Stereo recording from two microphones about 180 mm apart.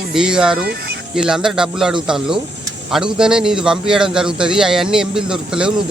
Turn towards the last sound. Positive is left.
turn(degrees=-5)  # may be behind; listen again after turning